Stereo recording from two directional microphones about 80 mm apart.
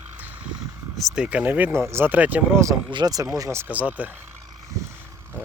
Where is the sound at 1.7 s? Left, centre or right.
Right.